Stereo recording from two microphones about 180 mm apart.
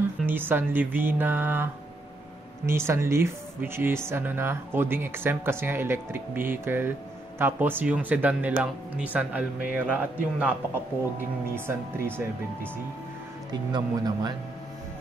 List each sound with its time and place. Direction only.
0.3 s speech: 10° right (ahead or behind)
13.5 s speech: 25° right (ahead or behind)